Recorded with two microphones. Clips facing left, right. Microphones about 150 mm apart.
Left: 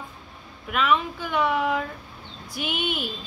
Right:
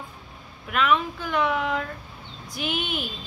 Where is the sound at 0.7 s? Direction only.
Centre (ahead or behind).